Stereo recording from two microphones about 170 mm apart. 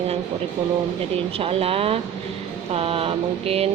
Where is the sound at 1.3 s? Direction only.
35° right (ahead or behind).